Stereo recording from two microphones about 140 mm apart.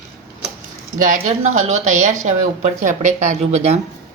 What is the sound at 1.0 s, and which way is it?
Speech, 60° right (ahead or behind).